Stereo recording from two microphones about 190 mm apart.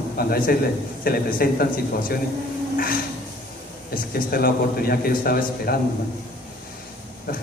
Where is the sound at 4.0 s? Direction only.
50° left (ahead or behind).